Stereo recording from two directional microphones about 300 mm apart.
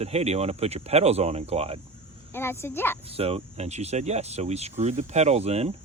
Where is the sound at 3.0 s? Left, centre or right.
Centre.